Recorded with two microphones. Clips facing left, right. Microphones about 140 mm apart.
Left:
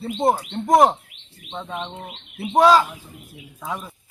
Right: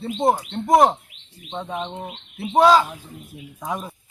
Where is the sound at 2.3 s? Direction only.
Centre (ahead or behind).